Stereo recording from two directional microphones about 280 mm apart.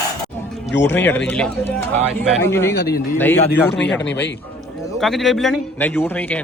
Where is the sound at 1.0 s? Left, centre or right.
Centre.